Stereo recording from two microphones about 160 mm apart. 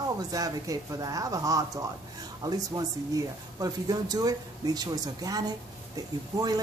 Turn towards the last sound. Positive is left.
turn(degrees=-25)  # may be behind; listen again after turning